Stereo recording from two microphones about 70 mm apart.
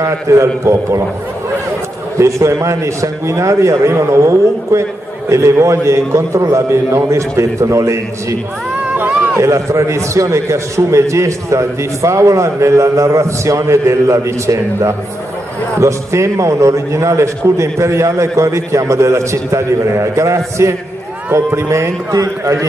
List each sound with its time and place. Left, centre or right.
0.0 s a man's voice: right
2.1 s a man's voice: right
9.4 s a man's voice: right